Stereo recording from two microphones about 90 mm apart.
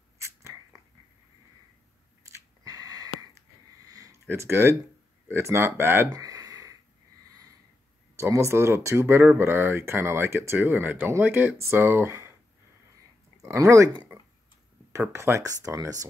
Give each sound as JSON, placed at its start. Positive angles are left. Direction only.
{"t": 0.4, "sound": "scissors", "side_deg": -30}
{"t": 2.6, "sound": "a sound", "side_deg": -40}
{"t": 3.8, "sound": "sniff", "side_deg": -40}
{"t": 4.3, "sound": "speech", "side_deg": -25}
{"t": 6.1, "sound": "a sound", "side_deg": -40}
{"t": 8.2, "sound": "speech", "side_deg": -30}
{"t": 13.4, "sound": "speech", "side_deg": -35}
{"t": 14.9, "sound": "speech", "side_deg": -30}